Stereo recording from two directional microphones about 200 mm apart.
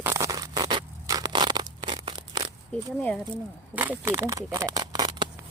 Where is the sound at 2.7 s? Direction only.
10° left (ahead or behind).